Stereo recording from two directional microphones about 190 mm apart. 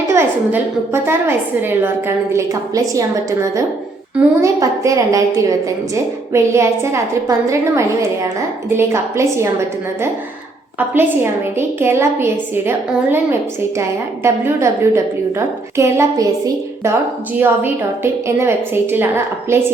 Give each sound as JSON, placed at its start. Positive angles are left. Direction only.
{"t": 0.1, "sound": "a woman's voice", "side_deg": -15}
{"t": 4.2, "sound": "a woman's voice", "side_deg": -15}
{"t": 10.8, "sound": "a woman's voice", "side_deg": -10}
{"t": 14.3, "sound": "a woman's voice", "side_deg": -15}
{"t": 17.3, "sound": "a woman's voice", "side_deg": -10}